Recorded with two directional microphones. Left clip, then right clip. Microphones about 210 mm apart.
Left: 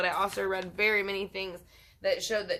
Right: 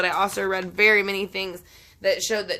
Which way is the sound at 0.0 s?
45° right (ahead or behind).